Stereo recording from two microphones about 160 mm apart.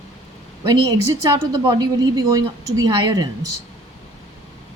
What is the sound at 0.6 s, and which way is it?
A woman's voice, 25° right (ahead or behind).